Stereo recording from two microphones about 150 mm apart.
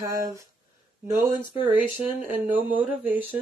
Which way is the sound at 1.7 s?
10° right (ahead or behind).